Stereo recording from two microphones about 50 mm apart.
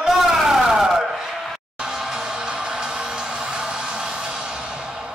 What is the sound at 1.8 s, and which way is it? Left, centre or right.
Music, centre.